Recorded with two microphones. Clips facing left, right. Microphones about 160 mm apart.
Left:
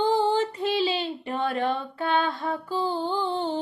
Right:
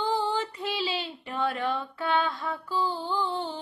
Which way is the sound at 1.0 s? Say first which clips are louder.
Left 3 dB; 50° left (ahead or behind).